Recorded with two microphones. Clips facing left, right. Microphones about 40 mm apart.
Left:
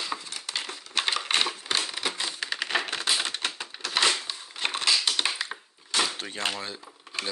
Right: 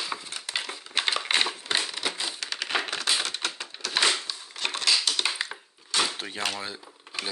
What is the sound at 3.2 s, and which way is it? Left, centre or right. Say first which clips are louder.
Typewriter: even; left.